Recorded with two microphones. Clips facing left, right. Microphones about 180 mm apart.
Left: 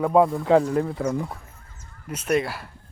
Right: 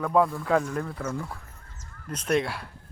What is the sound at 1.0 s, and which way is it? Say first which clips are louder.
Speech: left 6 dB; 15° left (ahead or behind).